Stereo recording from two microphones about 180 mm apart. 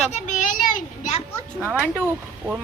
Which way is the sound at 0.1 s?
40° left (ahead or behind).